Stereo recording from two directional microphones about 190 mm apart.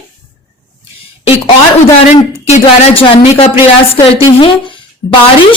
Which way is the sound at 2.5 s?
30° left (ahead or behind).